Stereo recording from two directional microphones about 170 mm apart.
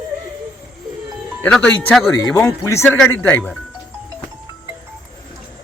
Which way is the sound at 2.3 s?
20° left (ahead or behind).